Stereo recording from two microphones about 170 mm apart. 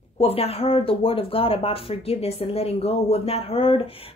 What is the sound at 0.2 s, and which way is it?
Speech, 35° left (ahead or behind).